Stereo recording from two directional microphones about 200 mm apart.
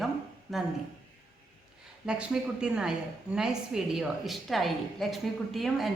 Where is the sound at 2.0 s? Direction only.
5° right (ahead or behind).